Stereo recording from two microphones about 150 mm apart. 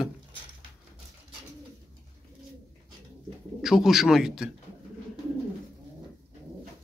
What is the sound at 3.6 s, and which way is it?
Speech, centre (ahead or behind).